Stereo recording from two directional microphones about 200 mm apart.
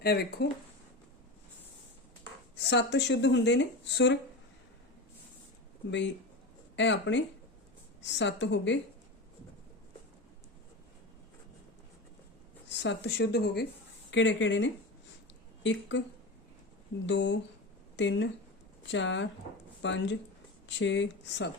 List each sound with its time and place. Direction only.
0.0 s speech: 50° left (ahead or behind)
2.6 s speech: 60° left (ahead or behind)
5.9 s speech: 65° left (ahead or behind)
12.6 s speech: 60° left (ahead or behind)
14.1 s speech: 70° left (ahead or behind)
17.1 s speech: 60° left (ahead or behind)